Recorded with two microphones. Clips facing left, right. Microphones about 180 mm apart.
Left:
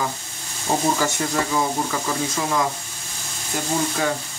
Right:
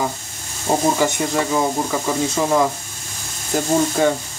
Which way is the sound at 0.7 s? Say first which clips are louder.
Right 4 dB; 20° right (ahead or behind).